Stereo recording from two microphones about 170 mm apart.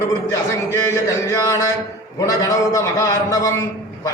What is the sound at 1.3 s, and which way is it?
A man's voice, 20° left (ahead or behind).